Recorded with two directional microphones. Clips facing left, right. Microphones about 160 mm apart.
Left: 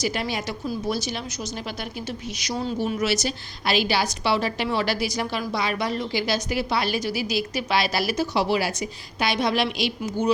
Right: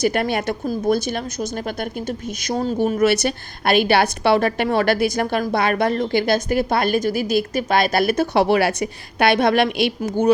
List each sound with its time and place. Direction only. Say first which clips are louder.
0.0 s a woman's voice: right 7 dB; 55° right (ahead or behind)